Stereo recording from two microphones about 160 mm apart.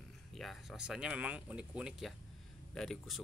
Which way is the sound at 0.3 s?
Centre (ahead or behind).